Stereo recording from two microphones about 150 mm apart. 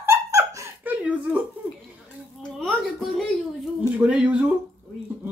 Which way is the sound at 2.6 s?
Centre (ahead or behind).